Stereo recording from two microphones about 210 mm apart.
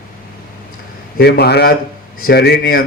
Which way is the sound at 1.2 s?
50° left (ahead or behind).